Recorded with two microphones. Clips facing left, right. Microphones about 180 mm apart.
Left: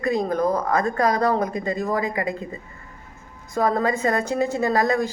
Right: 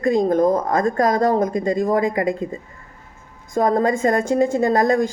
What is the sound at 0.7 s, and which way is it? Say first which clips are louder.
Speech: right 3 dB; 45° right (ahead or behind).